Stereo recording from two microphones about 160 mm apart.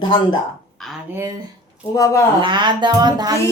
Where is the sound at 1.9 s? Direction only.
20° left (ahead or behind).